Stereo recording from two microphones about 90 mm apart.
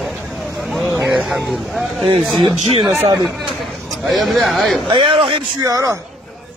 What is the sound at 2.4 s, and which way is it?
Speech, 60° right (ahead or behind).